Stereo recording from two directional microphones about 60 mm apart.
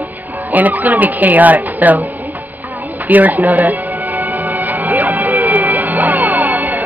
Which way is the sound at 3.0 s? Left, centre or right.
Right.